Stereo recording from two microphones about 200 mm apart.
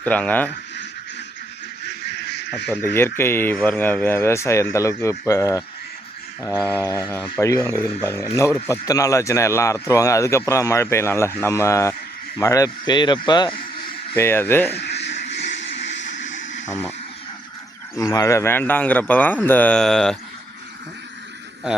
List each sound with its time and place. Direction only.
0.0 s speech: 5° left (ahead or behind)
1.8 s goose: 55° left (ahead or behind)
2.7 s speech: 10° left (ahead or behind)
7.1 s speech: 10° left (ahead or behind)
14.8 s vehicle: 60° left (ahead or behind)
16.6 s speech: 10° left (ahead or behind)
17.9 s speech: 15° left (ahead or behind)